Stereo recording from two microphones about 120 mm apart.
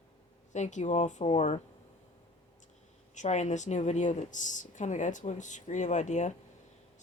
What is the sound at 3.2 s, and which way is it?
Speech, 80° left.